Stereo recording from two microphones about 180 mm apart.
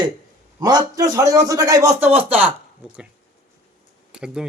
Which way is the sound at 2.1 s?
10° right (ahead or behind).